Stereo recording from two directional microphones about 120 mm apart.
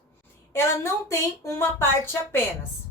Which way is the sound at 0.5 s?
20° left (ahead or behind).